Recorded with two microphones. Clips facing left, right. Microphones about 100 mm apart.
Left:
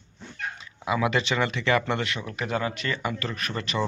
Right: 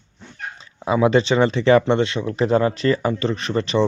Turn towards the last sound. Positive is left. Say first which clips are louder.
# right 9 dB
turn(degrees=-30)  # may be behind; listen again after turning